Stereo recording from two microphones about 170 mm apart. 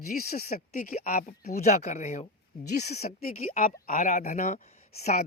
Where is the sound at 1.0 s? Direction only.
60° left (ahead or behind).